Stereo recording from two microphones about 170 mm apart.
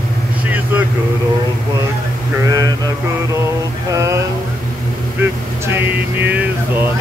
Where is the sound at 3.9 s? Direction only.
20° right (ahead or behind).